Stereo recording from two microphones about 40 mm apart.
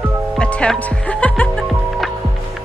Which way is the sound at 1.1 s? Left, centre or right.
Left.